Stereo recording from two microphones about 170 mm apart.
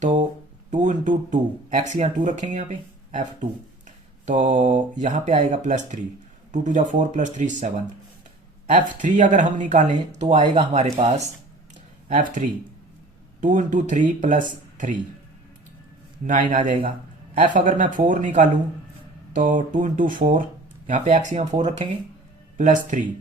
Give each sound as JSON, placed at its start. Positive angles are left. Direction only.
{"t": 0.0, "sound": "a sound", "side_deg": -50}
{"t": 0.7, "sound": "speech", "side_deg": -45}
{"t": 4.4, "sound": "speech", "side_deg": -50}
{"t": 12.0, "sound": "speech", "side_deg": -50}
{"t": 16.5, "sound": "speech", "side_deg": -45}